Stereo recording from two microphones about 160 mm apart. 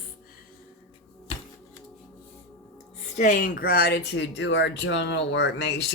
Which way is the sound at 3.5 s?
70° left (ahead or behind).